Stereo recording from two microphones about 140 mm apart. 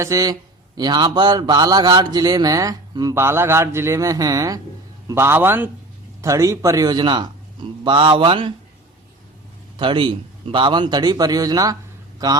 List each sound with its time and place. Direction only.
0.0 s a man's voice: 25° right (ahead or behind)
9.7 s a man's voice: 35° right (ahead or behind)